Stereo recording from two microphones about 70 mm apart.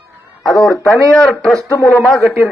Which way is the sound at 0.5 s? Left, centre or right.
Left.